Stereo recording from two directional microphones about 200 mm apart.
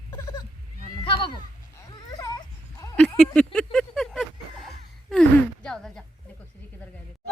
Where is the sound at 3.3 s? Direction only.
5° left (ahead or behind).